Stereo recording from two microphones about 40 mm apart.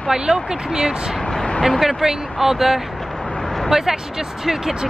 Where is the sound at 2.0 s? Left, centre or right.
Centre.